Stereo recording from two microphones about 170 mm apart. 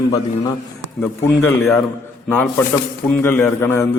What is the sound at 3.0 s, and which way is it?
Speech, 10° left (ahead or behind).